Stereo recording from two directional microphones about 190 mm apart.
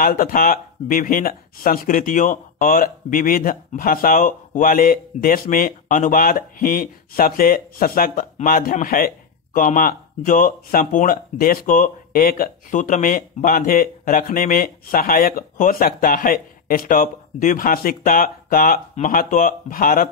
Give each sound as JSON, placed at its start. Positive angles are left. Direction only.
{"t": 0.0, "sound": "speech", "side_deg": 50}